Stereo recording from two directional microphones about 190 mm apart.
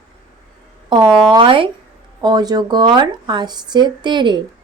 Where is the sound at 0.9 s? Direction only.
25° right (ahead or behind).